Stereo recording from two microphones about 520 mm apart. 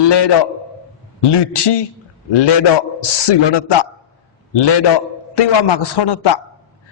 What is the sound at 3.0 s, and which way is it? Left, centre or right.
Speech, left.